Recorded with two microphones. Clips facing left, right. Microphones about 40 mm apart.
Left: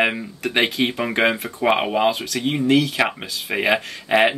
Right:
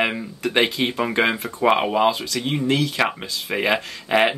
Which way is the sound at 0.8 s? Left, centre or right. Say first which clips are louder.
Left 1 dB; centre.